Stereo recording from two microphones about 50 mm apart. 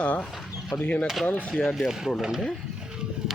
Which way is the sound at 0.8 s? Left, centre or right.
Left.